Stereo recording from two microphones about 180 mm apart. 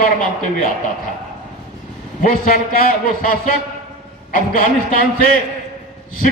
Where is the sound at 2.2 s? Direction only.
50° left (ahead or behind).